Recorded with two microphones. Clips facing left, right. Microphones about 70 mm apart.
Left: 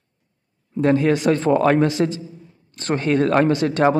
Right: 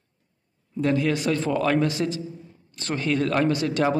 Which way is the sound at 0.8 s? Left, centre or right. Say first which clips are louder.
Left 6 dB; left.